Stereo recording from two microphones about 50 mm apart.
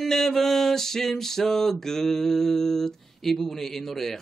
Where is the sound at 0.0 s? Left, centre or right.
Centre.